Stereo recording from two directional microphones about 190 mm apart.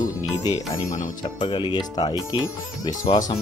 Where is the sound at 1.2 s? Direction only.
25° left (ahead or behind).